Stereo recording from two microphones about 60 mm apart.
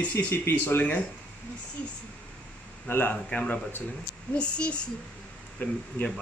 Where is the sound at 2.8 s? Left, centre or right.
Left.